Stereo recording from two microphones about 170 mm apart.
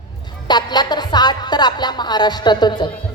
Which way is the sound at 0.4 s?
25° left (ahead or behind).